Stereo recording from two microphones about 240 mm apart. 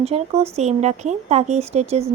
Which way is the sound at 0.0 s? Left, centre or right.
Right.